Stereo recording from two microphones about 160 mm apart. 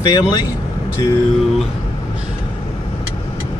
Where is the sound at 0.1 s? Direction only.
25° left (ahead or behind).